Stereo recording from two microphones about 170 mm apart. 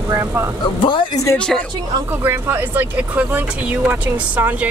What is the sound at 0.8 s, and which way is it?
Speech, 30° left (ahead or behind).